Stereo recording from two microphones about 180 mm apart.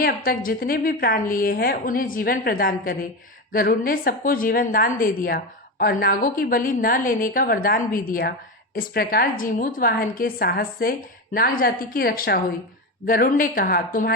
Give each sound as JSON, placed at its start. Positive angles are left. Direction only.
{"t": 0.0, "sound": "a woman's voice", "side_deg": 55}